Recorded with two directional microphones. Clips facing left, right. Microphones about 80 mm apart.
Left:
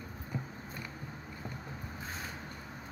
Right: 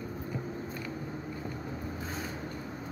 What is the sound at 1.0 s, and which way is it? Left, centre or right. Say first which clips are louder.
Vehicle: right 6 dB; centre.